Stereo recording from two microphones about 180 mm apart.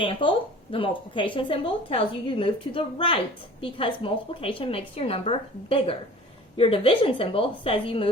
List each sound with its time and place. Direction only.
0.0 s a woman's voice: 30° left (ahead or behind)